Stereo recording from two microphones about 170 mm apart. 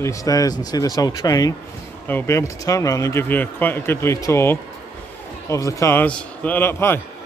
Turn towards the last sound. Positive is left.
turn(degrees=15)  # may be behind; listen again after turning